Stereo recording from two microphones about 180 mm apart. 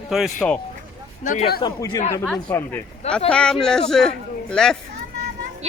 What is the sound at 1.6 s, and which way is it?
Speech, 20° left (ahead or behind).